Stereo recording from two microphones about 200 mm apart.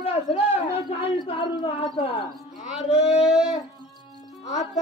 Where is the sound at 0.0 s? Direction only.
30° left (ahead or behind).